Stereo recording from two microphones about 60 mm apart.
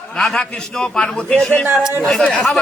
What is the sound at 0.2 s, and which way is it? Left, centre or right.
A man's voice, centre.